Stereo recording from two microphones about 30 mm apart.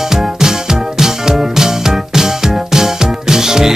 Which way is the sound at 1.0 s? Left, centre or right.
Centre.